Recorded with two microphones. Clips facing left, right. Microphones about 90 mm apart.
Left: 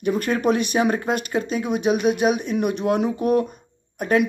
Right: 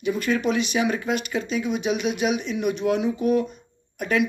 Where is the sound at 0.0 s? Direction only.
50° left (ahead or behind).